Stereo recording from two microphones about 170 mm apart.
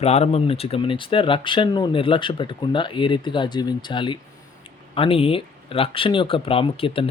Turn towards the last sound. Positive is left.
turn(degrees=35)  # may be behind; listen again after turning